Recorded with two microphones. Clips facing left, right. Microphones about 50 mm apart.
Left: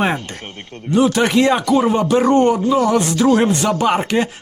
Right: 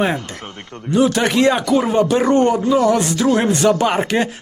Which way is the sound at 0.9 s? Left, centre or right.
Centre.